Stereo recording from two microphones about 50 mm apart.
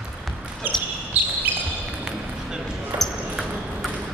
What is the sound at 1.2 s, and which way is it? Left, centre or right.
Basketball bounce, right.